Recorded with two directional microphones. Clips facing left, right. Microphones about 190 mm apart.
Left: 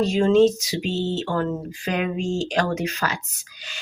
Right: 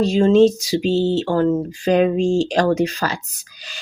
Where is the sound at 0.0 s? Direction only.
30° right (ahead or behind).